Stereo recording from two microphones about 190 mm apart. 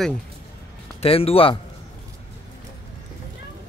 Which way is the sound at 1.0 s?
30° left (ahead or behind).